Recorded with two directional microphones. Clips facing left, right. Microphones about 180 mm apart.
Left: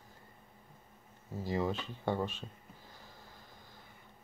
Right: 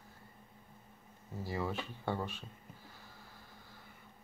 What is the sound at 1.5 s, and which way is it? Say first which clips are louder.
Speech: left 4 dB; 15° left (ahead or behind).